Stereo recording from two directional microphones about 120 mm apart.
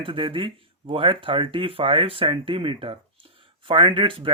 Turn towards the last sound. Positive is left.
turn(degrees=-45)  # may be behind; listen again after turning